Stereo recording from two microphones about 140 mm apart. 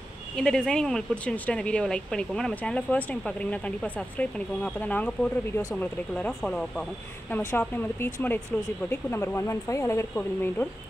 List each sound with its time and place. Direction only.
0.4 s speech: 5° left (ahead or behind)